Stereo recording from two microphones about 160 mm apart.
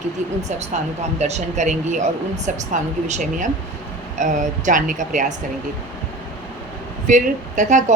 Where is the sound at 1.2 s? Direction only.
45° right (ahead or behind).